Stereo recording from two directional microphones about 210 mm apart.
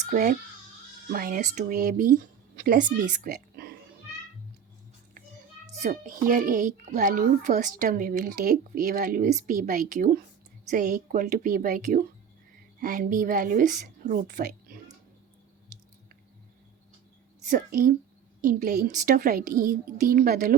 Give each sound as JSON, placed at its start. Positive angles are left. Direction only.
{"t": 0.1, "sound": "a child's voice", "side_deg": -35}
{"t": 5.7, "sound": "a child's voice", "side_deg": -35}
{"t": 17.5, "sound": "a child's voice", "side_deg": -40}